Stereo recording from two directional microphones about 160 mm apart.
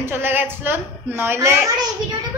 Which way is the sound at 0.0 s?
15° right (ahead or behind).